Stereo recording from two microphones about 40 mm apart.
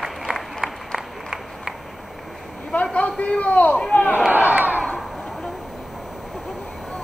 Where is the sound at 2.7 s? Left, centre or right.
Left.